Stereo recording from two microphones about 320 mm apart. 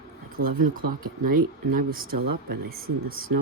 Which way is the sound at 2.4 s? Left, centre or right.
Right.